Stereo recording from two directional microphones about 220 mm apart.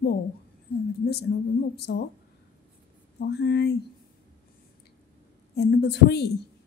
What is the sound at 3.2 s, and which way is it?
Speech, 50° left (ahead or behind).